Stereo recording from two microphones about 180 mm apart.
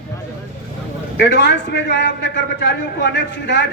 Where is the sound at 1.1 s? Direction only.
75° left (ahead or behind).